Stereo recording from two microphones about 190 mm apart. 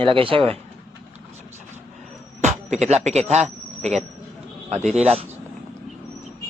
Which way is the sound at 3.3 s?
35° right (ahead or behind).